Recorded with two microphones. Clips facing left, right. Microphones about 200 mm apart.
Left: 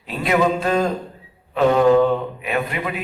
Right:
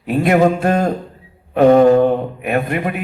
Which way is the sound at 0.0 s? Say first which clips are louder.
Right 6 dB; 55° right (ahead or behind).